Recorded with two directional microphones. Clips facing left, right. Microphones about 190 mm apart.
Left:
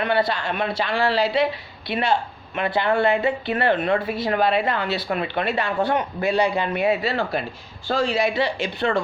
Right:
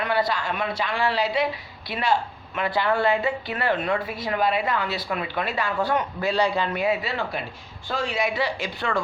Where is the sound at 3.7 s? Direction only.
30° left (ahead or behind).